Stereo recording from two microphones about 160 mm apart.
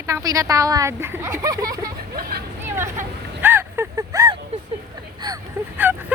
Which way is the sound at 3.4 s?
15° right (ahead or behind).